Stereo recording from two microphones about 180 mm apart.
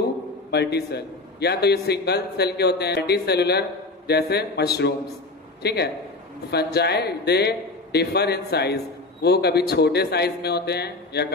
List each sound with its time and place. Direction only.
0.5 s a man's voice: 65° left (ahead or behind)